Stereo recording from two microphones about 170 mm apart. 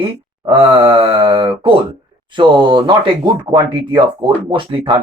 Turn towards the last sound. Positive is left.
turn(degrees=-30)  # may be behind; listen again after turning